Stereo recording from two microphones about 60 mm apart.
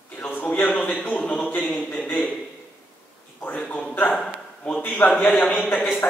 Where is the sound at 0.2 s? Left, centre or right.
Left.